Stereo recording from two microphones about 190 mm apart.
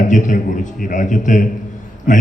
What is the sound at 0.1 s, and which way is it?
A man's voice, 40° left (ahead or behind).